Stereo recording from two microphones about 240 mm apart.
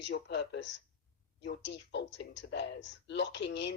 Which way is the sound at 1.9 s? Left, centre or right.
Left.